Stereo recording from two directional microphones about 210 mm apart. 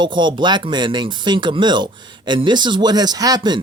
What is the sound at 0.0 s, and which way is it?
Speech, 20° right (ahead or behind).